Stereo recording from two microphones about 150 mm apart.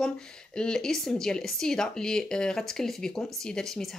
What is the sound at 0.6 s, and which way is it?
Speech, 5° left (ahead or behind).